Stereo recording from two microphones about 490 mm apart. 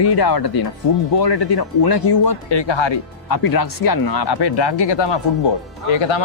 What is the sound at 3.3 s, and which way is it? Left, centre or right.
Speech, left.